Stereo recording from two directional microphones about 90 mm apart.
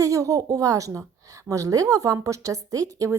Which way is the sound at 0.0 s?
40° right (ahead or behind).